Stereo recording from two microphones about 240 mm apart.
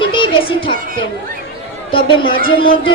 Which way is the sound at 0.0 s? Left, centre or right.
Left.